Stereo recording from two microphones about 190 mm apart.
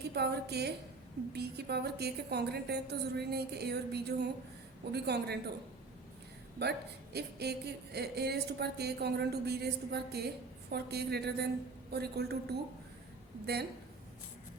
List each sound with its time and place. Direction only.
0.1 s a woman's voice: 60° right (ahead or behind)
6.6 s a woman's voice: 60° right (ahead or behind)